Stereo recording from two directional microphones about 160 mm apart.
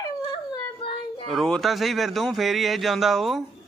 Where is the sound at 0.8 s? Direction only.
35° left (ahead or behind).